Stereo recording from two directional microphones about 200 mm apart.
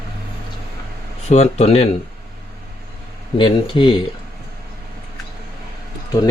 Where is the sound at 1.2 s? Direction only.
35° left (ahead or behind).